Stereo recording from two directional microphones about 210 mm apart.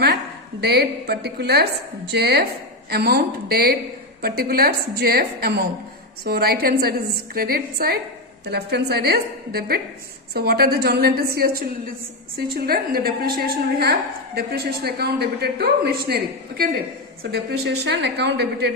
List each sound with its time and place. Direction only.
0.6 s a woman's voice: 50° right (ahead or behind)